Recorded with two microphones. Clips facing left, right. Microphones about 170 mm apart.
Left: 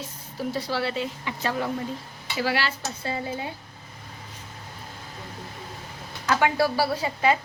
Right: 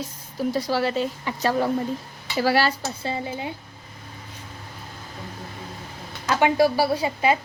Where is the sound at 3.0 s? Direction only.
25° right (ahead or behind).